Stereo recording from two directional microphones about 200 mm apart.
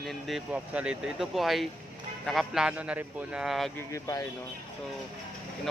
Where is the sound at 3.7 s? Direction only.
15° left (ahead or behind).